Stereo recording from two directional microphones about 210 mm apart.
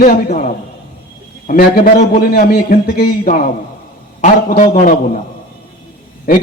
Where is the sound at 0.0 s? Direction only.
45° left (ahead or behind).